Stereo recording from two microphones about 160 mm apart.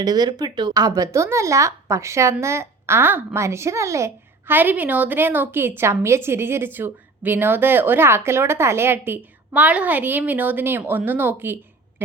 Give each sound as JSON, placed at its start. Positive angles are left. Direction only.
{"t": 0.0, "sound": "a child's voice", "side_deg": -25}